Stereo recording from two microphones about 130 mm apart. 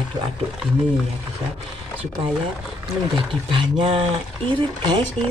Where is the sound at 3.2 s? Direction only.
40° right (ahead or behind).